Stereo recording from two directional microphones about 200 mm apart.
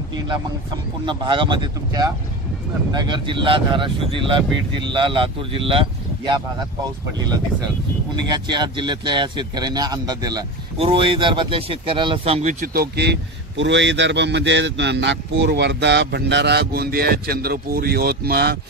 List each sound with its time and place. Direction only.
1.0 s speech: 25° right (ahead or behind)
8.3 s speech: 20° right (ahead or behind); by 18.6 s 50° right (ahead or behind)